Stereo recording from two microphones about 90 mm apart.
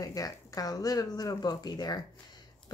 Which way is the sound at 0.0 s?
40° left (ahead or behind).